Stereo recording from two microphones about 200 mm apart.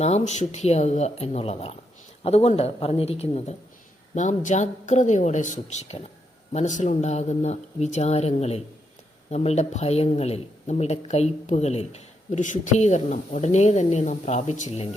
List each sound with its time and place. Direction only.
0.0 s speech: 35° left (ahead or behind)